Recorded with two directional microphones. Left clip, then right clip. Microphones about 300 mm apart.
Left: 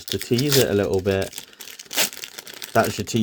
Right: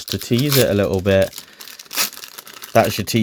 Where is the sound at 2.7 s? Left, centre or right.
Right.